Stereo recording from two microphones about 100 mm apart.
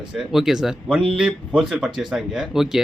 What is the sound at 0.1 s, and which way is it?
Speech, 5° right (ahead or behind).